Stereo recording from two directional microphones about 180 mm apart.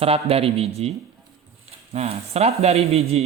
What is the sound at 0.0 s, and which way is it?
Speech, 35° right (ahead or behind).